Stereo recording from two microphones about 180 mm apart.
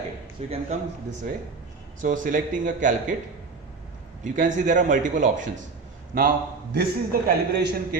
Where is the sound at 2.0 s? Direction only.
45° right (ahead or behind).